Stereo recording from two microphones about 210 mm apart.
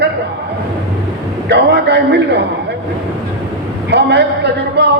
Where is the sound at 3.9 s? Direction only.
55° right (ahead or behind).